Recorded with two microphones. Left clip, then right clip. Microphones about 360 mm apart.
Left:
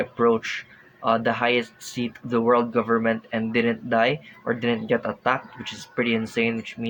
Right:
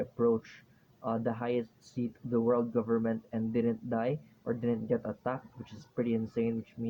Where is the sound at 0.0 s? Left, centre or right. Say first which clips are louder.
Left 9 dB; right.